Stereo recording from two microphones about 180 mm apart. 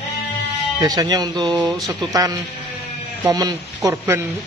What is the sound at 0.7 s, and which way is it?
Speech, 20° right (ahead or behind).